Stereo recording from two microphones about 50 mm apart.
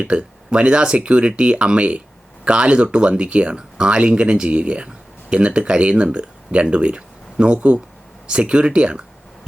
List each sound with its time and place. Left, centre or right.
0.0 s speech: right